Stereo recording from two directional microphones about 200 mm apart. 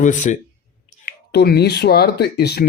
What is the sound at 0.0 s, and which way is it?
Speech, 40° left (ahead or behind).